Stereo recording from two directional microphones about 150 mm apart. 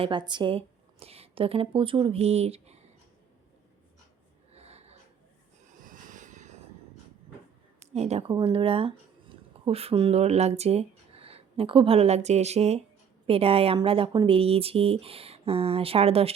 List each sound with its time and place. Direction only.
0.0 s speech: 30° right (ahead or behind)
4.5 s snort: 45° right (ahead or behind)
5.6 s vehicle: 60° right (ahead or behind)
7.8 s a sound: 45° right (ahead or behind)
8.3 s speech: 35° right (ahead or behind)